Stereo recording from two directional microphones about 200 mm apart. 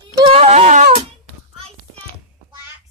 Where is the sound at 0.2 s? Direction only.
30° right (ahead or behind).